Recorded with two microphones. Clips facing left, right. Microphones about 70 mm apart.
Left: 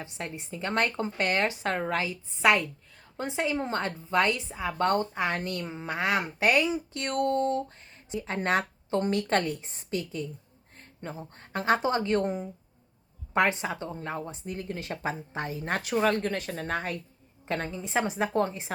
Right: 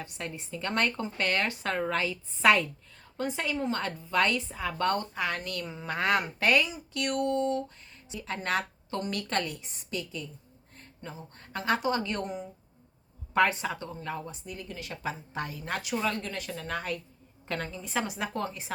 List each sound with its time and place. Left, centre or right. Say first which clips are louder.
0.0 s a woman's voice: left 1 dB; left
6.2 s a woman's voice: left 2 dB; left
7.2 s speech: left 3 dB; left
13.3 s a woman's voice: even; left
16.6 s a woman's voice: left 2 dB; left